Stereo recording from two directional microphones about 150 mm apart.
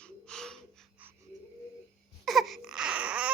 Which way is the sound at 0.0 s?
5° left (ahead or behind).